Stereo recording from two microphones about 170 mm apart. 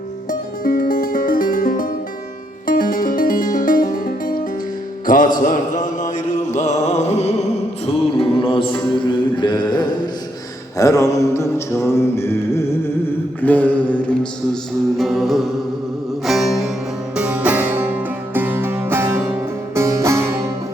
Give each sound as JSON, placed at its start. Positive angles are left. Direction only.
{"t": 0.3, "sound": "music", "side_deg": 55}
{"t": 10.8, "sound": "mantra", "side_deg": 20}
{"t": 13.4, "sound": "music", "side_deg": 10}